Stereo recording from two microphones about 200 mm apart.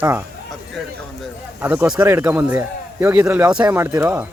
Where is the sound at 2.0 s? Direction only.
15° right (ahead or behind).